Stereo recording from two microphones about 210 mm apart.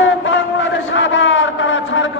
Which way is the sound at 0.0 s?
65° left (ahead or behind).